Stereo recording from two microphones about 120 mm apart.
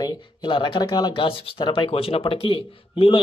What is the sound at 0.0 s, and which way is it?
Speech, 40° left (ahead or behind).